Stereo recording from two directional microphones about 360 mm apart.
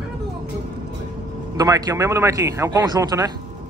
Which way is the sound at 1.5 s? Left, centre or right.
Centre.